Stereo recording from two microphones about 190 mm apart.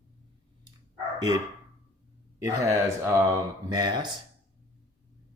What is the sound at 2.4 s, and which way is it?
Speech, 15° right (ahead or behind).